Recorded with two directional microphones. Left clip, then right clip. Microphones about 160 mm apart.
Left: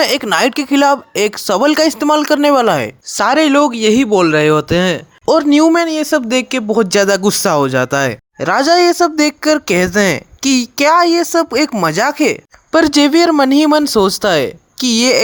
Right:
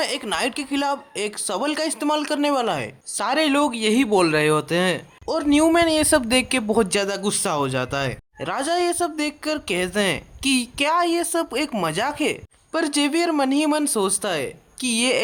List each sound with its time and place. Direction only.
0.0 s speech: 50° left (ahead or behind); by 6.9 s 25° left (ahead or behind)
6.9 s speech: 45° left (ahead or behind)